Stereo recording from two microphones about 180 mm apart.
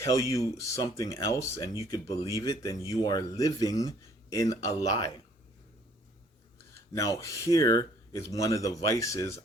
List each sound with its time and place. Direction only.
0.0 s speech: 15° left (ahead or behind)
6.9 s speech: 15° left (ahead or behind)